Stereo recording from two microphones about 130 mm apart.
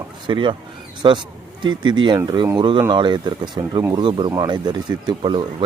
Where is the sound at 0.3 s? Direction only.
40° right (ahead or behind).